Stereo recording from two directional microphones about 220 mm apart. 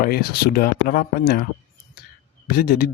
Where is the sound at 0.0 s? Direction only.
45° left (ahead or behind).